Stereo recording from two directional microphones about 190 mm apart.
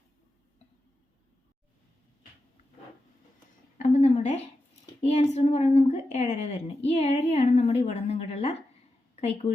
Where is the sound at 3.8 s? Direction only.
40° left (ahead or behind).